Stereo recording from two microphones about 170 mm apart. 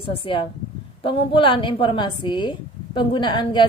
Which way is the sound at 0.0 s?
30° left (ahead or behind).